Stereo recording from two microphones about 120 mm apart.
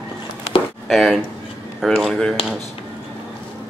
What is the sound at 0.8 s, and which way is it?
Speech, centre (ahead or behind).